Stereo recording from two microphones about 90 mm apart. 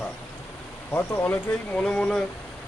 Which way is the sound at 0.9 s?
25° left (ahead or behind).